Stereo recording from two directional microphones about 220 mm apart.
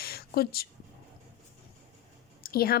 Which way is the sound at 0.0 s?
45° left (ahead or behind).